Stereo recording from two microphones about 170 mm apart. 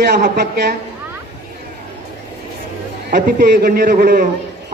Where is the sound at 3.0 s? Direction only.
65° right (ahead or behind).